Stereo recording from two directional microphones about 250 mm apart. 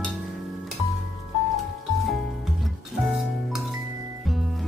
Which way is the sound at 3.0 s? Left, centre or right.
Centre.